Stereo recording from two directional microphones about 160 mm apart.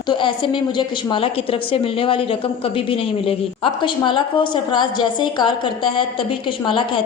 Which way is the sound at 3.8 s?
30° left (ahead or behind).